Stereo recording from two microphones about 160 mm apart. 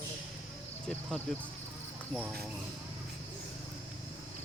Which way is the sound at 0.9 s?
5° left (ahead or behind).